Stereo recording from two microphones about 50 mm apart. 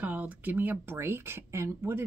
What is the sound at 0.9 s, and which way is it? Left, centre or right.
Speech, right.